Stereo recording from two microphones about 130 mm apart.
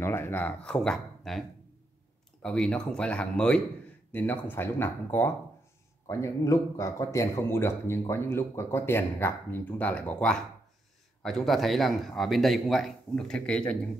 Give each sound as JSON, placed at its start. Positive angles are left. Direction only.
{"t": 0.0, "sound": "speech", "side_deg": 15}
{"t": 2.4, "sound": "speech", "side_deg": 5}